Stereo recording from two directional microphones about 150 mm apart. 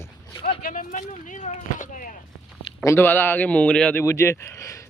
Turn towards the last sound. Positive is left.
turn(degrees=20)  # may be behind; listen again after turning